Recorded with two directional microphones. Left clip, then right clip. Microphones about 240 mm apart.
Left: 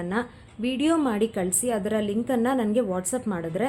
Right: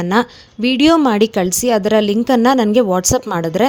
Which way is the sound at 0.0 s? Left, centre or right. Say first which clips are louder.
Right 13 dB; right.